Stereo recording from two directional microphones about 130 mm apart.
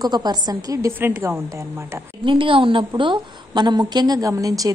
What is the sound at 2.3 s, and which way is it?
A woman's voice, 40° right (ahead or behind).